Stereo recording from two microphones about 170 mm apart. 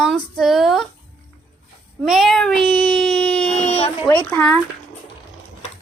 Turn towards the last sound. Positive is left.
turn(degrees=10)  # may be behind; listen again after turning